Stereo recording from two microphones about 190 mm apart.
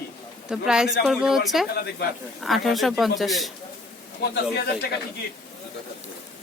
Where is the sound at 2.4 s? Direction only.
Centre (ahead or behind).